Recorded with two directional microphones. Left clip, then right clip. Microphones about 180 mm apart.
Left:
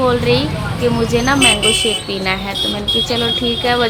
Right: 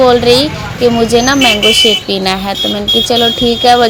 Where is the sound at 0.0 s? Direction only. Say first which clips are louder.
Right 8 dB; 25° right (ahead or behind).